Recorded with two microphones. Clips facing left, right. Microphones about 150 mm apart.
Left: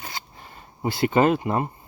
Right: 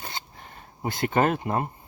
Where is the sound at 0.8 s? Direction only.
5° left (ahead or behind).